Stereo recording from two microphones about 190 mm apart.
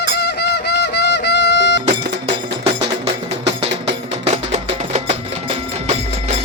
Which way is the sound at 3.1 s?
30° right (ahead or behind).